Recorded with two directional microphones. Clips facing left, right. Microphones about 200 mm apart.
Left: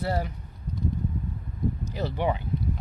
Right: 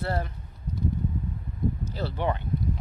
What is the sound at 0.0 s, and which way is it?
Speech, 10° left (ahead or behind).